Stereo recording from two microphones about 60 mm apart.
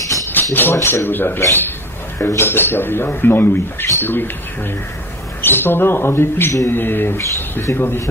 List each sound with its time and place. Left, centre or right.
0.3 s rattle: left
0.7 s speech: left
1.0 s speech: left
5.4 s speech: left